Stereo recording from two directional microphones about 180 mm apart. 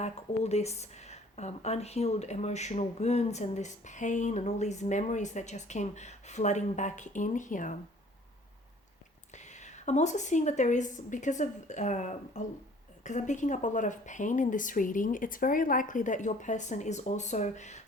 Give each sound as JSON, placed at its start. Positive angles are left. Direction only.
{"t": 0.0, "sound": "speech", "side_deg": 35}
{"t": 9.3, "sound": "a woman's voice", "side_deg": 40}